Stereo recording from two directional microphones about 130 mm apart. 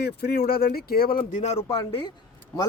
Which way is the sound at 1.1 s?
70° left (ahead or behind).